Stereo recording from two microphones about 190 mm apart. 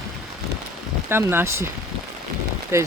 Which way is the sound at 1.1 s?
10° right (ahead or behind).